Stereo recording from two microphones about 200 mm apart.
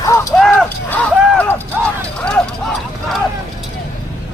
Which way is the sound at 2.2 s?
5° left (ahead or behind).